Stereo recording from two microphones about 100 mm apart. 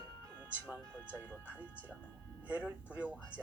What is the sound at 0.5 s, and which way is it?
Speech, 15° right (ahead or behind).